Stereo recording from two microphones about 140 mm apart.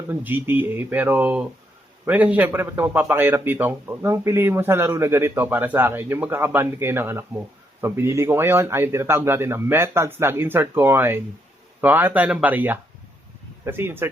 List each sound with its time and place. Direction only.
0.1 s a man's voice: 15° right (ahead or behind)